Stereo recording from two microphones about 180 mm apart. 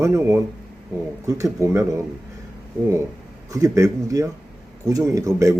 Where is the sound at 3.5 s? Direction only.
20° right (ahead or behind).